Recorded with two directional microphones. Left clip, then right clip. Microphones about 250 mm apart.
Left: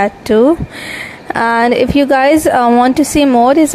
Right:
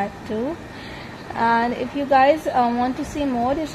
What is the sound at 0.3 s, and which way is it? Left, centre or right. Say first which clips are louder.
A woman's voice: left 17 dB; left.